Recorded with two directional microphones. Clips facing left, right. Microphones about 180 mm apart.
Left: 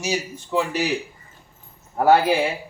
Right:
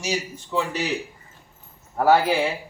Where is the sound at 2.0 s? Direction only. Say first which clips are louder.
Left 2 dB; 15° left (ahead or behind).